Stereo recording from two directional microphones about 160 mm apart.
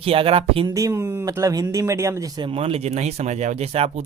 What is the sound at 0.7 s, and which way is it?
Speech, 20° right (ahead or behind).